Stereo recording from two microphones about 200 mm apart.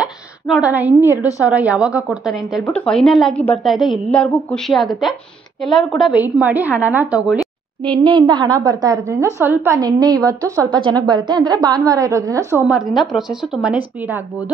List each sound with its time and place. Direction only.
0.0 s a sound: 5° right (ahead or behind)
1.4 s a woman's voice: 5° right (ahead or behind)
7.9 s a woman's voice: 25° right (ahead or behind)